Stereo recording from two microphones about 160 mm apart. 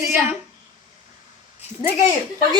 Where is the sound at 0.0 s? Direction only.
15° right (ahead or behind).